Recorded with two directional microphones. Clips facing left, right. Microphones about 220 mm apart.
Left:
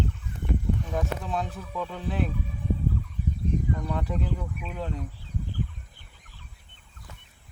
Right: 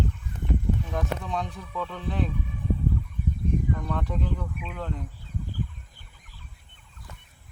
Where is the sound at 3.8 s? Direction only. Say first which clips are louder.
Even; 10° left (ahead or behind).